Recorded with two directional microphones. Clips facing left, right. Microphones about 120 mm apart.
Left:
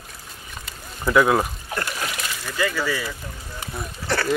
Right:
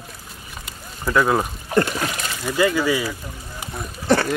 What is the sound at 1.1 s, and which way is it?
Speech, centre (ahead or behind).